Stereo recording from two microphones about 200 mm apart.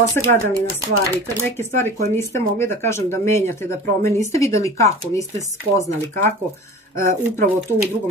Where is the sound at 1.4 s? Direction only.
10° left (ahead or behind).